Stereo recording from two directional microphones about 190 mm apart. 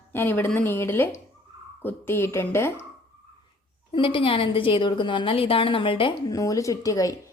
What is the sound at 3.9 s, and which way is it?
A woman's voice, 30° left (ahead or behind).